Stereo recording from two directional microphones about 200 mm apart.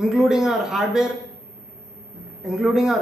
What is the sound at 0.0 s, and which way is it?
Speech, centre (ahead or behind).